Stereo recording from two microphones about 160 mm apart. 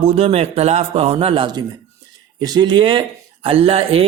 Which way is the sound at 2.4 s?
25° right (ahead or behind).